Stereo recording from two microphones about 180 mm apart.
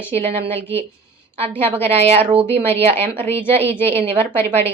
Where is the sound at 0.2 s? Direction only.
35° right (ahead or behind).